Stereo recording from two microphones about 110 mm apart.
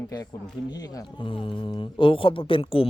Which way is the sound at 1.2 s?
50° left (ahead or behind).